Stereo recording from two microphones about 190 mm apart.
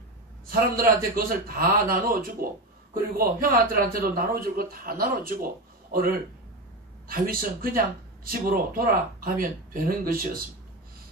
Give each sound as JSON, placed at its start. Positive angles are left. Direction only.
{"t": 0.5, "sound": "speech", "side_deg": -50}